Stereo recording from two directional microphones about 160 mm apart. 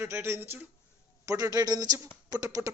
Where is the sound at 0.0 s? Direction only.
15° right (ahead or behind).